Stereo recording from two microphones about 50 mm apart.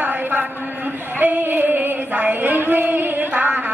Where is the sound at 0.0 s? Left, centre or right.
Right.